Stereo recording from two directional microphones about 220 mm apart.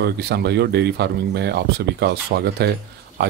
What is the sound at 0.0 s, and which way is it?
Speech, 50° right (ahead or behind).